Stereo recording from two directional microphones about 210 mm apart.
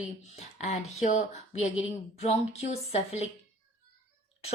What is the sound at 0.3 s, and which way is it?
Speech, 30° left (ahead or behind).